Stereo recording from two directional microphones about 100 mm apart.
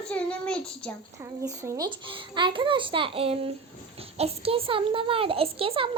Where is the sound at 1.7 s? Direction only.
55° right (ahead or behind).